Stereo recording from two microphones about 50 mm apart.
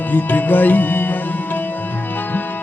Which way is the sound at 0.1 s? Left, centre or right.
Left.